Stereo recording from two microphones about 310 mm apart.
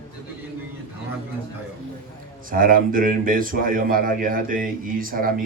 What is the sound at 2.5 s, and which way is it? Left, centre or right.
Speech, right.